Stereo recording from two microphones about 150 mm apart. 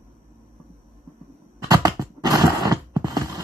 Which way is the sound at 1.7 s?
25° right (ahead or behind).